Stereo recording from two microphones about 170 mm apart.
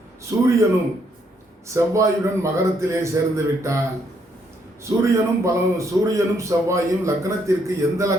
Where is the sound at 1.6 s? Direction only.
15° right (ahead or behind).